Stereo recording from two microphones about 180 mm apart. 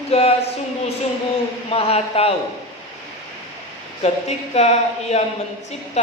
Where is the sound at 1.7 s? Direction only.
35° left (ahead or behind).